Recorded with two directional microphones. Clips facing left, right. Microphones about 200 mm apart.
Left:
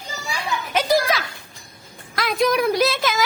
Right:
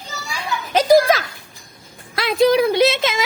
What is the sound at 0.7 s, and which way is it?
Speech, 40° right (ahead or behind).